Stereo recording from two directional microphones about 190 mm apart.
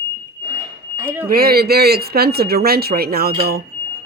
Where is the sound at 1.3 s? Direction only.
55° right (ahead or behind).